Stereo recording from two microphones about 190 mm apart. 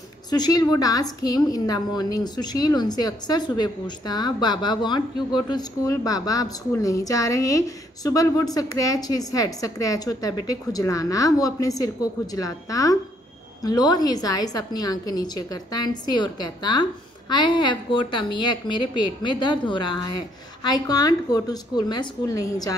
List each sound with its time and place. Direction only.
0.3 s a woman's voice: 20° left (ahead or behind)